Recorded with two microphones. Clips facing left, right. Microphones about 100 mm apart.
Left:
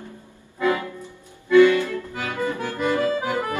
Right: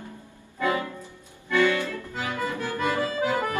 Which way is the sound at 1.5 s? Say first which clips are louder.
Left 8 dB; 20° left (ahead or behind).